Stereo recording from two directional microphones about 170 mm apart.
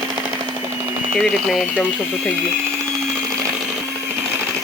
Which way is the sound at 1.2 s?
Centre (ahead or behind).